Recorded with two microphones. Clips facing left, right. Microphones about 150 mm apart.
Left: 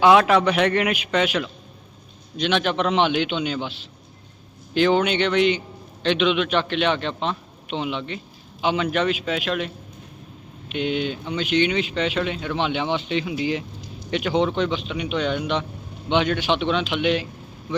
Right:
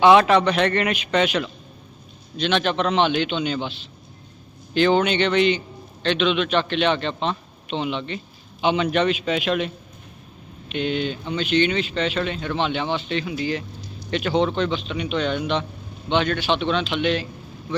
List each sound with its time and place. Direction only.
0.0 s a man's voice: 5° left (ahead or behind)
10.7 s a man's voice: 10° left (ahead or behind)